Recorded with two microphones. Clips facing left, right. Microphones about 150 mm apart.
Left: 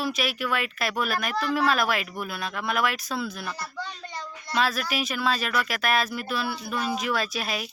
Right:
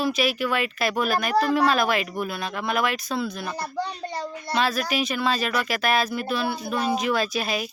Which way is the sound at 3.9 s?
40° right (ahead or behind).